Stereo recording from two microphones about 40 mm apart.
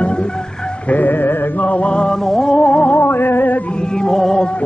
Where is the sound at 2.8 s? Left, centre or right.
Left.